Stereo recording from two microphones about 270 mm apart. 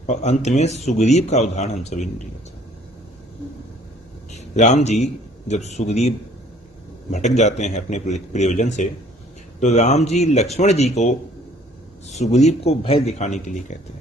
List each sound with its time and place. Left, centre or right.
0.0 s speech: left
4.3 s a man's voice: left
12.3 s speech: left